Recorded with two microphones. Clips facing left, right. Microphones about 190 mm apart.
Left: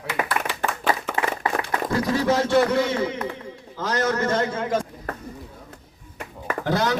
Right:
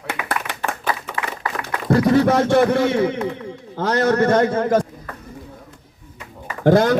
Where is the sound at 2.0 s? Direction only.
60° right (ahead or behind).